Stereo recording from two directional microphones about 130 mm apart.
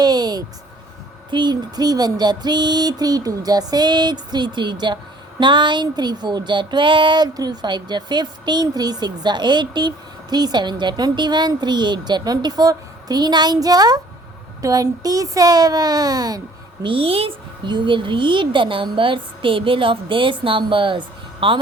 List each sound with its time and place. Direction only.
0.0 s a sound: 30° right (ahead or behind)
1.3 s a child's voice: 35° right (ahead or behind)
16.8 s speech: 45° right (ahead or behind)